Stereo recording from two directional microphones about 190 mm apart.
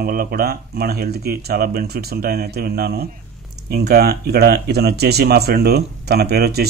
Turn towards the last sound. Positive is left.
turn(degrees=-55)  # may be behind; listen again after turning